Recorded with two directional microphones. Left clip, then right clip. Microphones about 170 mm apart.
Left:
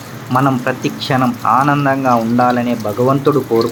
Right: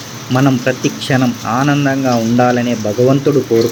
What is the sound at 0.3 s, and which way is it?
Speech, 45° right (ahead or behind).